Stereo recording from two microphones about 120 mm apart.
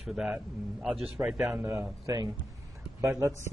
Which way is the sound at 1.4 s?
25° right (ahead or behind).